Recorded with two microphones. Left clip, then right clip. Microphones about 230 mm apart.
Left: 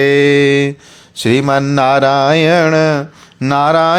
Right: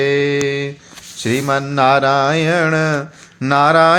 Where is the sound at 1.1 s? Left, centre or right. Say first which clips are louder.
Left 5 dB; left.